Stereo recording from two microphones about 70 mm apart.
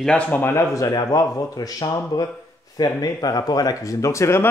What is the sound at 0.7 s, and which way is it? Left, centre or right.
Speech, left.